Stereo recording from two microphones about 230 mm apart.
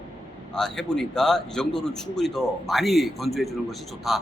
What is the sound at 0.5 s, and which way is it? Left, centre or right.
A man's voice, centre.